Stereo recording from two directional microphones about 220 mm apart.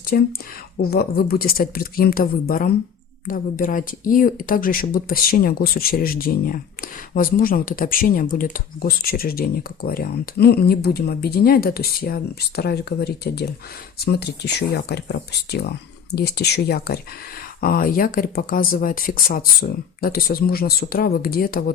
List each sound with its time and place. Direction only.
0.0 s speech: 45° left (ahead or behind)